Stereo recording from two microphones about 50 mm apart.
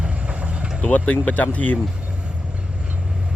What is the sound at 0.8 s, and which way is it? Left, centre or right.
Speech, left.